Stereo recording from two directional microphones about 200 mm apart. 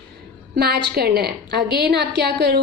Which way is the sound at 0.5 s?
55° right (ahead or behind).